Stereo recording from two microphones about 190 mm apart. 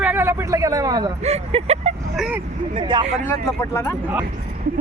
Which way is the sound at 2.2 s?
5° right (ahead or behind).